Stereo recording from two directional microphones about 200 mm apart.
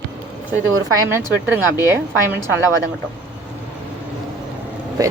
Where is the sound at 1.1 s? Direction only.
10° right (ahead or behind).